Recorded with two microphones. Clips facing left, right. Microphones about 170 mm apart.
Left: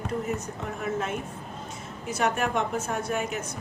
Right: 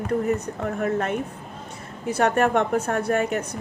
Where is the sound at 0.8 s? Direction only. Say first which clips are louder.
Right 5 dB; 60° right (ahead or behind).